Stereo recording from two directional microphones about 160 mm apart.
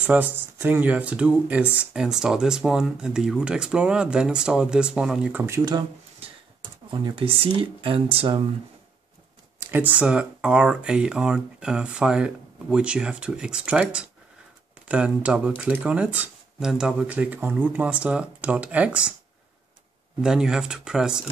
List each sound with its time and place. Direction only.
0.0 s speech: 10° right (ahead or behind)
6.9 s speech: 30° right (ahead or behind)
9.6 s speech: 10° right (ahead or behind)
20.2 s speech: 5° right (ahead or behind)